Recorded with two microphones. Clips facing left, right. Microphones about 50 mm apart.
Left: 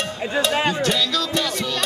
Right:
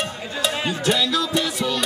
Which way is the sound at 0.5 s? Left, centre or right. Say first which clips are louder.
Left 5 dB; left.